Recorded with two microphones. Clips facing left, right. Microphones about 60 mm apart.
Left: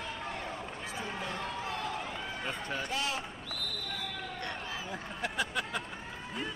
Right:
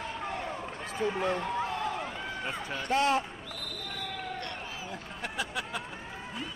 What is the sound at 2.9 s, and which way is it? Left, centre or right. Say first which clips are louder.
Speech: right 11 dB; right.